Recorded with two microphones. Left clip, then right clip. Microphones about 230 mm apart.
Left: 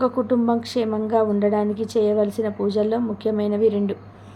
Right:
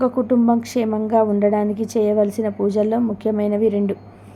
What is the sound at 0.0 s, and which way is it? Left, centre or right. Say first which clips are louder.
A woman's voice: right 2 dB; centre.